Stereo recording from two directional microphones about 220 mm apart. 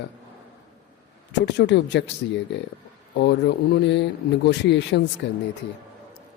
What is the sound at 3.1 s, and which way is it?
Speech, 50° left (ahead or behind).